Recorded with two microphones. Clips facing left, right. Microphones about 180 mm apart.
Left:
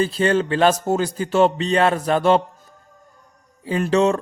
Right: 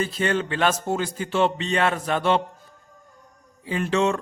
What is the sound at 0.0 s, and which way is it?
A man's voice, 30° left (ahead or behind).